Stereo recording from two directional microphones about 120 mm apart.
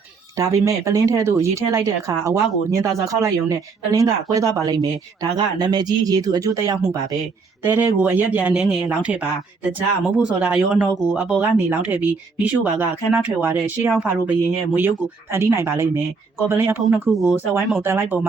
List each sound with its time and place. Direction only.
0.3 s speech: 25° right (ahead or behind)
7.6 s speech: 15° right (ahead or behind)
17.1 s speech: centre (ahead or behind)
17.7 s speech: 20° right (ahead or behind)